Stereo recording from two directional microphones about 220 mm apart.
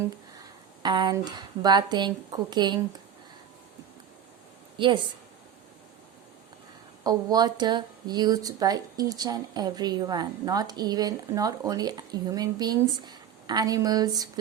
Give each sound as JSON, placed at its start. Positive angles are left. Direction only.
{"t": 0.0, "sound": "speech", "side_deg": -20}
{"t": 4.8, "sound": "speech", "side_deg": -20}
{"t": 7.0, "sound": "speech", "side_deg": -20}